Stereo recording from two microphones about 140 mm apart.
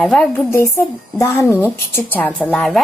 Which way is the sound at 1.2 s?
20° left (ahead or behind).